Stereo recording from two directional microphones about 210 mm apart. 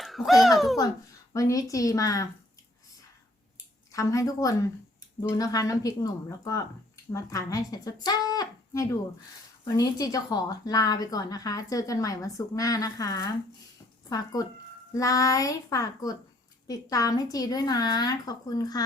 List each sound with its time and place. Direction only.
0.0 s a sound: centre (ahead or behind)
1.3 s speech: 15° left (ahead or behind)
3.9 s speech: 15° left (ahead or behind)